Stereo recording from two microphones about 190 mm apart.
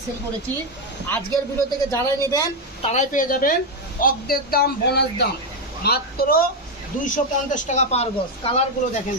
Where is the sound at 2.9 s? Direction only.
40° left (ahead or behind).